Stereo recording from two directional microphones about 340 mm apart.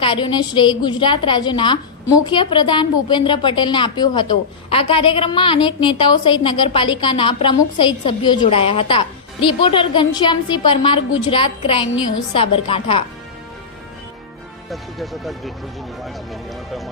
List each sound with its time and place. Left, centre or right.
0.0 s a woman's voice: centre
14.7 s speech: centre